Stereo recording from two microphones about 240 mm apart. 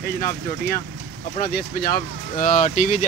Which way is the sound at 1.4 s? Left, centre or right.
Left.